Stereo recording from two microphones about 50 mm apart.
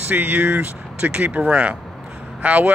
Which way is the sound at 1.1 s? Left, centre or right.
Right.